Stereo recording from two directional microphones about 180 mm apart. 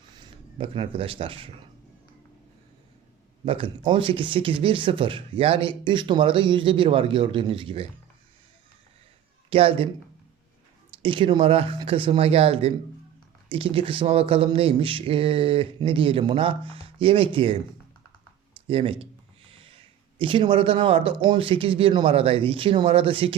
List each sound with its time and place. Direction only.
0.2 s speech: 30° right (ahead or behind)
3.4 s speech: 30° right (ahead or behind)
9.5 s speech: 30° right (ahead or behind)
11.0 s speech: 30° right (ahead or behind)
18.7 s speech: 30° right (ahead or behind)
19.5 s a sound: 30° right (ahead or behind)
20.1 s speech: 30° right (ahead or behind)